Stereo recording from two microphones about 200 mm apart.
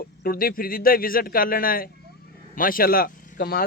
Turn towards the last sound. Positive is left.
turn(degrees=50)  # may be behind; listen again after turning